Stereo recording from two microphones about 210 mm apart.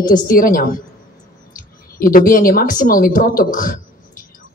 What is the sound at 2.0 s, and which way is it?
A woman's voice, 40° left (ahead or behind).